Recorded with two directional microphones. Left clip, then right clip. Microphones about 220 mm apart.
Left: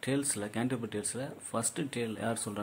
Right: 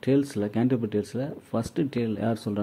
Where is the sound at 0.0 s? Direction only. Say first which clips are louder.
Right 9 dB; 10° right (ahead or behind).